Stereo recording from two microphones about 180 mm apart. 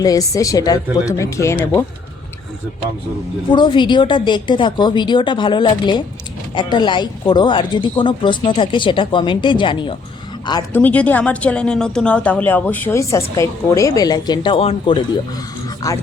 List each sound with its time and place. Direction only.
0.0 s speech: 20° left (ahead or behind)
3.5 s speech: 25° left (ahead or behind)
10.7 s a woman's voice: 10° left (ahead or behind); by 15.0 s 30° left (ahead or behind)
15.8 s speech: 20° left (ahead or behind)